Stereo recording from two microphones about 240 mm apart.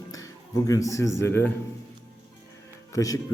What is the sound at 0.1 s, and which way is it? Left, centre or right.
Speech, centre.